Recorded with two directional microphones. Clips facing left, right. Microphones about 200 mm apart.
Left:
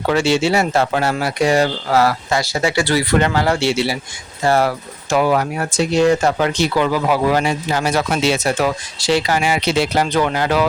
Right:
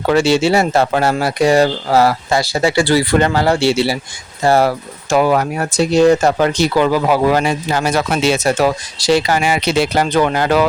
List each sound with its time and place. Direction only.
0.1 s speech: 35° right (ahead or behind)
5.1 s speech: 45° right (ahead or behind)